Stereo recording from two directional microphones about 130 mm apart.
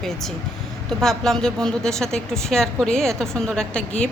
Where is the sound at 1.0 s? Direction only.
Centre (ahead or behind).